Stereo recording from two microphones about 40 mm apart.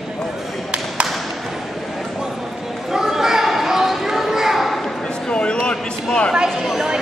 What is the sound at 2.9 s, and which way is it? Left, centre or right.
Children playing, centre.